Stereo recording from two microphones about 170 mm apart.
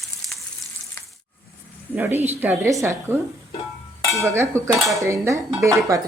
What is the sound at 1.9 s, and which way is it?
Dishes, 10° right (ahead or behind).